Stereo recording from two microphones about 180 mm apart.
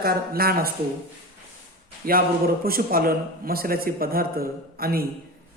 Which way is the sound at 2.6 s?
55° right (ahead or behind).